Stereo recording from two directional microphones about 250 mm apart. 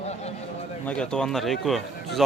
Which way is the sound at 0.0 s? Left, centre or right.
Left.